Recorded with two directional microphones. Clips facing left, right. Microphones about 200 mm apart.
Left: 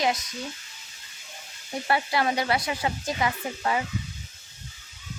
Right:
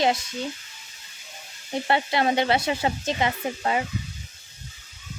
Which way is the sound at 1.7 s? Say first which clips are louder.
Right 2 dB; 25° right (ahead or behind).